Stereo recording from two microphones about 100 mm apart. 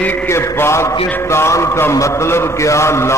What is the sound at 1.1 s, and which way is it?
A man's voice, 25° left (ahead or behind).